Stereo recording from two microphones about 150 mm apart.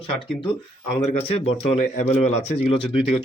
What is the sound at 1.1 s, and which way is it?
Speech, 40° left (ahead or behind).